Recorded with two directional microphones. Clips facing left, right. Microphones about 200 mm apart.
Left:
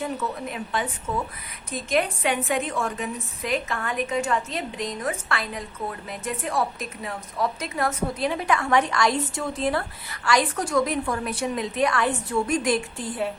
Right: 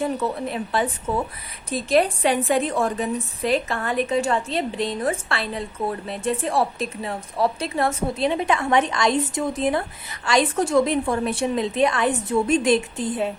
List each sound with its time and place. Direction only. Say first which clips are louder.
0.0 s a woman's voice: right 5 dB; 30° right (ahead or behind)